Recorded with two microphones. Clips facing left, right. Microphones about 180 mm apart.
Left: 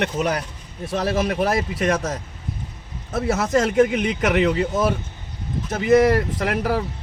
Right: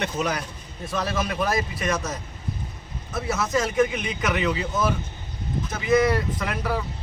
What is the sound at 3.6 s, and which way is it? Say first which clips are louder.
Speech: left 5 dB; 65° left (ahead or behind).